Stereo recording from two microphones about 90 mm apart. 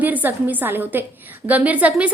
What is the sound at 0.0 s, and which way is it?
A woman's voice, 20° right (ahead or behind).